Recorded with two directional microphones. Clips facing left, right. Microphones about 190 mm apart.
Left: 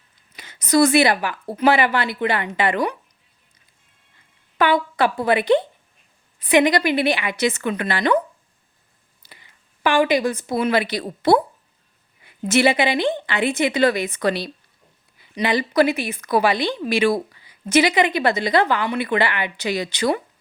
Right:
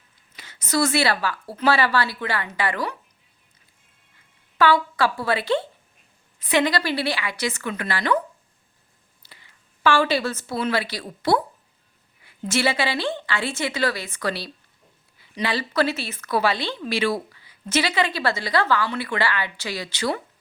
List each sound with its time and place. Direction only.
0.3 s speech: 15° left (ahead or behind)
4.5 s speech: 20° left (ahead or behind)
9.2 s a woman's voice: 15° left (ahead or behind)